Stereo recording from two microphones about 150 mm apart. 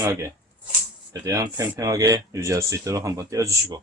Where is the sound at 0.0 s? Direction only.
20° right (ahead or behind).